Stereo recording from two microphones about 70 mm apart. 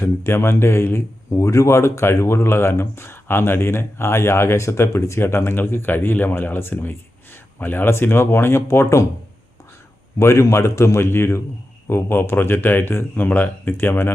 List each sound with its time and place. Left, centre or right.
0.0 s a man's voice: left
10.2 s a man's voice: left